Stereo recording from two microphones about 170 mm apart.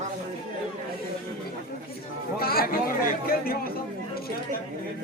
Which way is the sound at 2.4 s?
65° left (ahead or behind).